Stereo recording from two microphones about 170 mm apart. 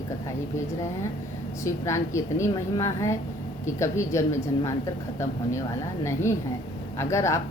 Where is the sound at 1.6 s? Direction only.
20° left (ahead or behind).